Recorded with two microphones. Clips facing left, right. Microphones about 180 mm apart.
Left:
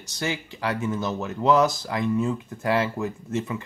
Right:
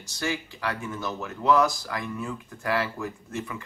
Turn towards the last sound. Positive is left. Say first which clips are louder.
# left 6 dB
turn(degrees=20)  # may be behind; listen again after turning